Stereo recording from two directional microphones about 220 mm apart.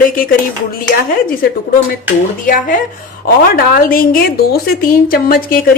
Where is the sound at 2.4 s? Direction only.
40° left (ahead or behind).